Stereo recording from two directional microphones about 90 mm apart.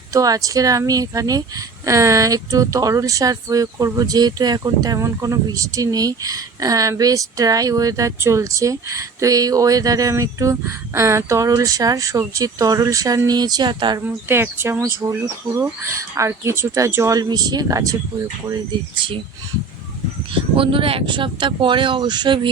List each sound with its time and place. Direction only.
0.1 s speech: 40° right (ahead or behind)
4.9 s speech: 35° right (ahead or behind); by 14.0 s 60° right (ahead or behind)
14.3 s speech: 25° right (ahead or behind)
17.2 s speech: 50° right (ahead or behind)
20.6 s speech: 80° right; by 22.4 s 55° right (ahead or behind)